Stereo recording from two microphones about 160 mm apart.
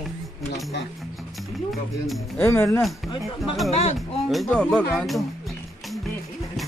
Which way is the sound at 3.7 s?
40° left (ahead or behind).